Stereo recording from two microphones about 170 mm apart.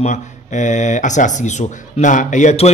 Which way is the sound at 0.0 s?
45° left (ahead or behind).